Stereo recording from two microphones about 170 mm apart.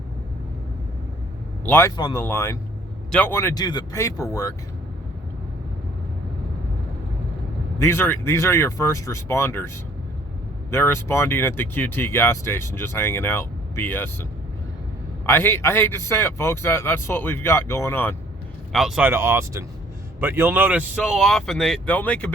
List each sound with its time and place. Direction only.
1.6 s speech: 15° left (ahead or behind)
2.0 s speech: 25° left (ahead or behind)
7.8 s speech: 15° left (ahead or behind)
15.3 s speech: 15° left (ahead or behind)
18.7 s speech: centre (ahead or behind)